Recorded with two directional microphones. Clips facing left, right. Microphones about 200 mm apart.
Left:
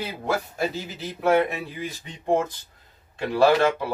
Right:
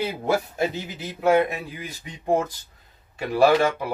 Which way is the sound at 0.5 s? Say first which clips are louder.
Right 2 dB; 20° right (ahead or behind).